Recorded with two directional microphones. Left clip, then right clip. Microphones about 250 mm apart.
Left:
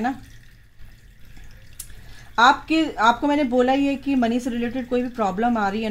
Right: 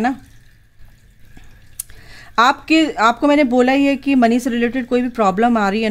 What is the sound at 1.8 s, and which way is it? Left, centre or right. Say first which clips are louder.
Speech: right 7 dB; right.